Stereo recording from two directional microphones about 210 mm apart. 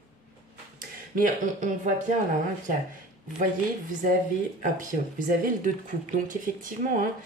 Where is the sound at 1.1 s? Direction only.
40° right (ahead or behind).